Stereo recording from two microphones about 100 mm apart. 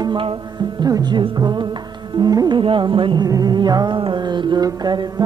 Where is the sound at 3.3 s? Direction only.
40° right (ahead or behind).